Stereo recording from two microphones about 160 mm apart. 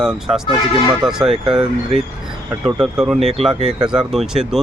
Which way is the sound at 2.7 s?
5° right (ahead or behind).